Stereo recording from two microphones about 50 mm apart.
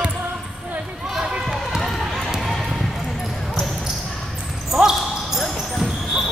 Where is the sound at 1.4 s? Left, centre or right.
Centre.